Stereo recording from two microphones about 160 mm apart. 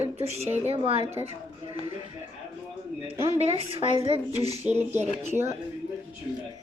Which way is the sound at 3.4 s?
40° right (ahead or behind).